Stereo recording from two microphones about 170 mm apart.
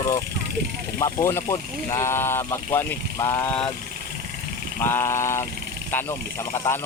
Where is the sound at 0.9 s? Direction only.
15° left (ahead or behind).